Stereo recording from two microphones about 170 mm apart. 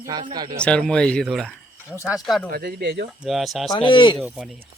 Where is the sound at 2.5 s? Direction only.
65° right (ahead or behind).